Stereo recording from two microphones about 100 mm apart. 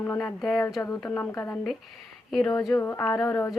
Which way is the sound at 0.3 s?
Centre (ahead or behind).